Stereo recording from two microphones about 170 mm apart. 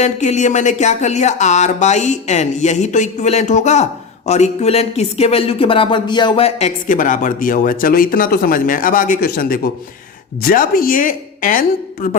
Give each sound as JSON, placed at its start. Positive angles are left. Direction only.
{"t": 0.0, "sound": "a woman's voice", "side_deg": 45}